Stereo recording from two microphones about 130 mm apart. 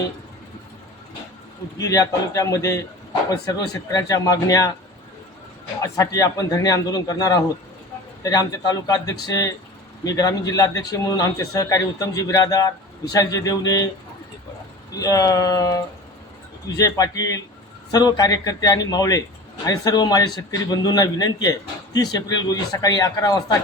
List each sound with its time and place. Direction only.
1.8 s a man's voice: 25° left (ahead or behind)
5.8 s a man's voice: 25° left (ahead or behind)
14.9 s a man's voice: 30° left (ahead or behind)